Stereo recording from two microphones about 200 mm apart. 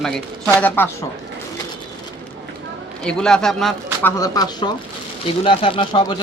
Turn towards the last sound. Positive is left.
turn(degrees=25)  # may be behind; listen again after turning